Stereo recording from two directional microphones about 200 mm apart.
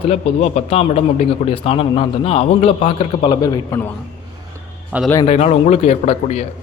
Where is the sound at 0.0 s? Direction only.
30° left (ahead or behind).